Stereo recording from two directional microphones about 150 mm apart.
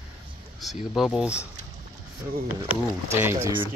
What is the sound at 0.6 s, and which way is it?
Speech, centre (ahead or behind).